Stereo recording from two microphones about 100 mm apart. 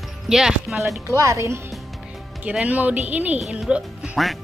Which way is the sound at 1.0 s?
30° right (ahead or behind).